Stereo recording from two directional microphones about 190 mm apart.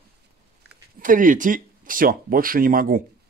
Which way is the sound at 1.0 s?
45° right (ahead or behind).